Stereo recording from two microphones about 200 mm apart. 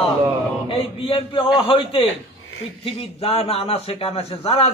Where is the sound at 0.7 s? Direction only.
25° left (ahead or behind).